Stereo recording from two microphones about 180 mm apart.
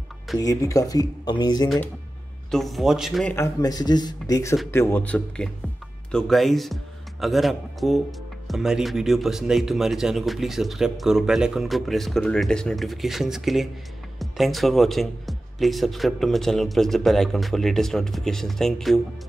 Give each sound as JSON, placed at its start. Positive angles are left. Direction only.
{"t": 0.4, "sound": "speech", "side_deg": 20}
{"t": 2.5, "sound": "speech", "side_deg": 0}
{"t": 3.3, "sound": "speech", "side_deg": 20}